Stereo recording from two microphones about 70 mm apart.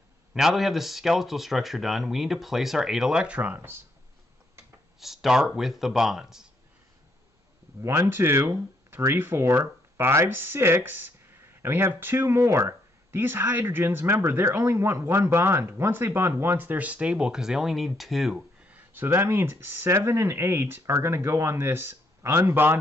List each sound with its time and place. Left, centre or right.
0.3 s speech: centre; by 3.8 s right
5.0 s speech: centre
7.8 s speech: right; by 18.4 s centre
18.7 s a sound: right
19.0 s speech: right